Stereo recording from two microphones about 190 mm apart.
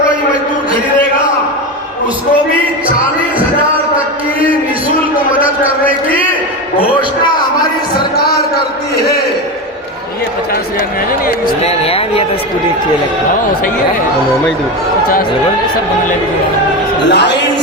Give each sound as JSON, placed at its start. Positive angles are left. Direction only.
{"t": 8.1, "sound": "a sound", "side_deg": 55}
{"t": 11.6, "sound": "speech", "side_deg": 30}
{"t": 17.1, "sound": "speech", "side_deg": 65}